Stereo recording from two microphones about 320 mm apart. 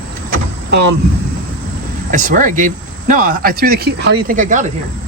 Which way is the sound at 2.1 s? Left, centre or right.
Right.